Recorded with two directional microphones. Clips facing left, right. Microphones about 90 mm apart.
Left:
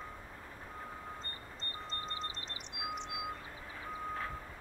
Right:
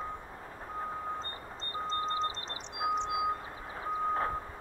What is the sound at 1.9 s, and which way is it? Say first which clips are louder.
Reversing beeps: right 11 dB; 30° right (ahead or behind).